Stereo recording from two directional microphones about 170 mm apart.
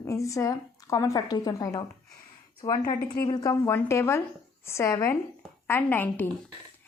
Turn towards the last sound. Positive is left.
turn(degrees=10)  # may be behind; listen again after turning